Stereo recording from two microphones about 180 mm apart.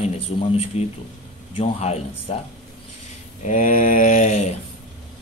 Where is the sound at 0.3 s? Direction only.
30° left (ahead or behind).